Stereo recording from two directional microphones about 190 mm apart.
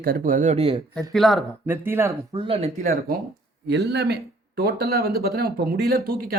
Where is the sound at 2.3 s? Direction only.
30° right (ahead or behind).